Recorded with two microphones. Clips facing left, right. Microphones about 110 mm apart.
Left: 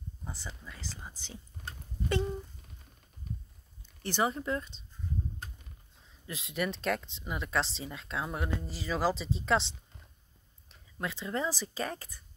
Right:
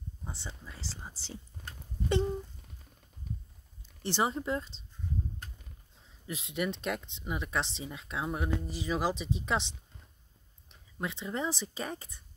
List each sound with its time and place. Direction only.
0.3 s speech: 25° right (ahead or behind)
4.0 s speech: 25° right (ahead or behind)
6.2 s speech: 25° right (ahead or behind)
10.7 s speech: 20° right (ahead or behind)